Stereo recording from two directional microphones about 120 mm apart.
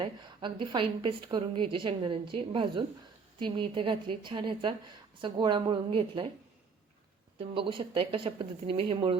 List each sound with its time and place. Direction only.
0.0 s a woman's voice: 45° right (ahead or behind)
7.3 s a woman's voice: 45° right (ahead or behind)